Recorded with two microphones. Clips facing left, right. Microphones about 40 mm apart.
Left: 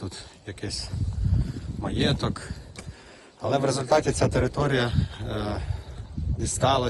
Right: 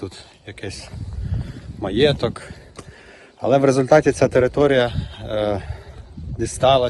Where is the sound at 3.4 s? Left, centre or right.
Right.